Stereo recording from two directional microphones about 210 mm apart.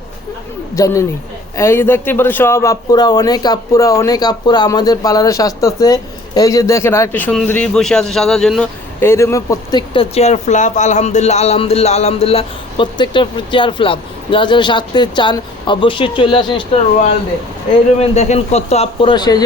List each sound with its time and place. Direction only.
0.8 s speech: 15° left (ahead or behind)
18.0 s speech: 30° left (ahead or behind)